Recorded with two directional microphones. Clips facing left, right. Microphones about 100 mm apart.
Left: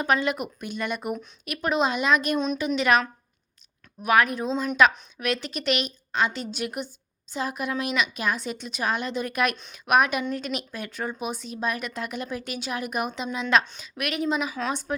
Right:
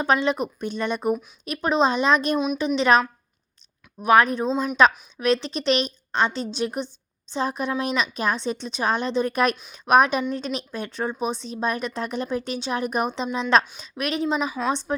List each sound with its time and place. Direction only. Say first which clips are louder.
0.0 s speech: right 3 dB; 25° right (ahead or behind)
4.0 s speech: right 4 dB; 30° right (ahead or behind)
4.4 s speech: right 3 dB; 5° right (ahead or behind)
4.8 s a woman's voice: right 2 dB; 25° right (ahead or behind)